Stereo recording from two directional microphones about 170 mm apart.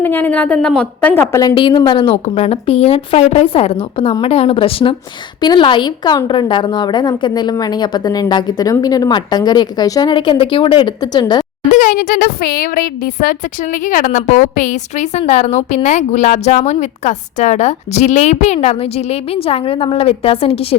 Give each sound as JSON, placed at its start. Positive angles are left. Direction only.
{"t": 0.0, "sound": "a woman's voice", "side_deg": 10}
{"t": 11.7, "sound": "a child's voice", "side_deg": 55}